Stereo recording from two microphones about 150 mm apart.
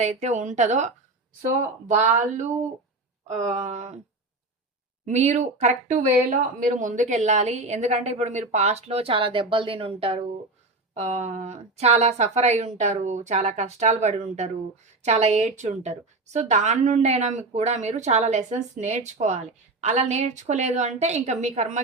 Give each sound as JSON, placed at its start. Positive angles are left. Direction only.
{"t": 0.0, "sound": "speech", "side_deg": -50}
{"t": 1.9, "sound": "speech", "side_deg": -55}
{"t": 3.2, "sound": "speech", "side_deg": -50}
{"t": 5.0, "sound": "speech", "side_deg": -50}